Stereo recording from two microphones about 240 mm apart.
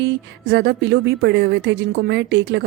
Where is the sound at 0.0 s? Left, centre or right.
Right.